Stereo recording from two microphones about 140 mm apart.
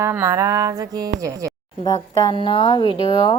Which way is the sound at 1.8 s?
25° left (ahead or behind).